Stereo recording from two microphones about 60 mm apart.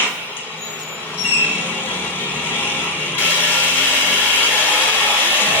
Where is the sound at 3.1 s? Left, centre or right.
Left.